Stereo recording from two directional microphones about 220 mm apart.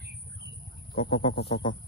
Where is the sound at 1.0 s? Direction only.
25° left (ahead or behind).